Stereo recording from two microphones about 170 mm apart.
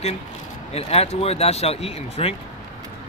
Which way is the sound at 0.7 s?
35° left (ahead or behind).